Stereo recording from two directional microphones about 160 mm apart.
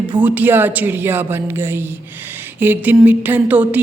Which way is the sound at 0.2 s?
10° right (ahead or behind).